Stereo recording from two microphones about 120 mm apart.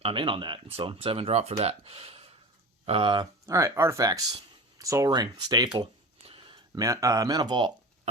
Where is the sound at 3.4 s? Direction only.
25° right (ahead or behind).